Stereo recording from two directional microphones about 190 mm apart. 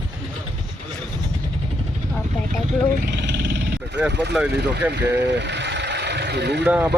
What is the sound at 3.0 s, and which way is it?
Vehicle, 65° right (ahead or behind).